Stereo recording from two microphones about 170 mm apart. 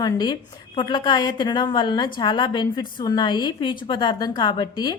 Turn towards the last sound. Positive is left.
turn(degrees=25)  # may be behind; listen again after turning